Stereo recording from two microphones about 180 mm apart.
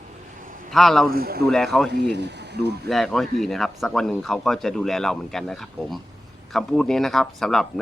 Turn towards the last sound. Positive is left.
turn(degrees=5)  # may be behind; listen again after turning